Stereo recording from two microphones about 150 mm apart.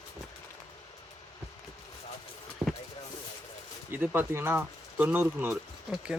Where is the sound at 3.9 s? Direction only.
10° right (ahead or behind).